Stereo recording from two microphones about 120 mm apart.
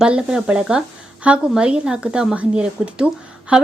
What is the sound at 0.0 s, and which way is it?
A woman's voice, 5° right (ahead or behind).